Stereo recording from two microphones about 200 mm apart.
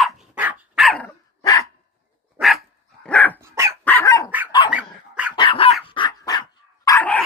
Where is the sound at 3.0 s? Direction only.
5° left (ahead or behind).